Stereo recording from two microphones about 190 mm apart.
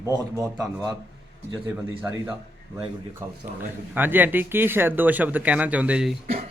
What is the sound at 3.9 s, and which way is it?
Speech, 10° right (ahead or behind).